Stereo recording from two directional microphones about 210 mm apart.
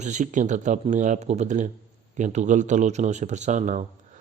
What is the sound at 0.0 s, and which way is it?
A man's voice, 35° right (ahead or behind).